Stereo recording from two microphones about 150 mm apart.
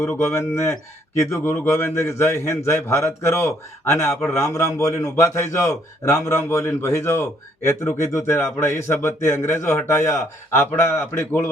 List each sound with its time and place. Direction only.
0.0 s a man's voice: 10° left (ahead or behind)